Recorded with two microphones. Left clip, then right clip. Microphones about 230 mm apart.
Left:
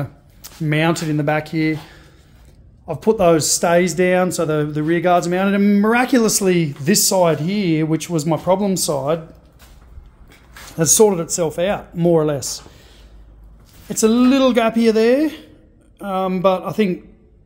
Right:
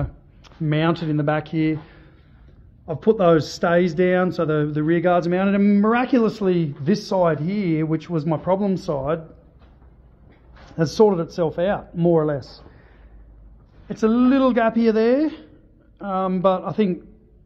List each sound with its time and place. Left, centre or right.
0.0 s speech: centre
10.8 s speech: centre
13.8 s speech: left